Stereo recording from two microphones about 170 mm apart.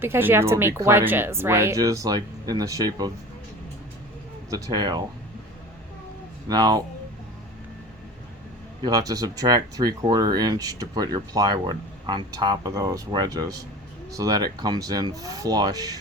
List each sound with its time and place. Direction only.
0.0 s speech: 10° right (ahead or behind)
4.5 s speech: 25° right (ahead or behind)
6.5 s speech: 25° right (ahead or behind)
8.8 s speech: 20° right (ahead or behind)